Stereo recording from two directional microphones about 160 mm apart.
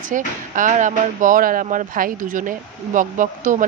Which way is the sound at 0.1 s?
50° right (ahead or behind).